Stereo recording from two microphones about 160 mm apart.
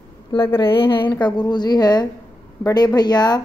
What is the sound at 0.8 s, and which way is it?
A woman's voice, 30° left (ahead or behind).